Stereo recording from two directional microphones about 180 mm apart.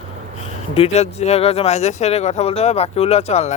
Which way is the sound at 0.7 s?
35° left (ahead or behind).